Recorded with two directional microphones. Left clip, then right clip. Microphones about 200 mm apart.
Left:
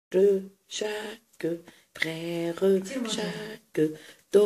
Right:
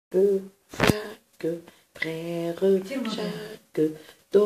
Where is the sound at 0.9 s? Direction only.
30° left (ahead or behind).